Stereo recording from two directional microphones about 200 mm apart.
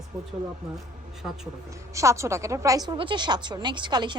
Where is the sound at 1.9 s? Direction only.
15° right (ahead or behind).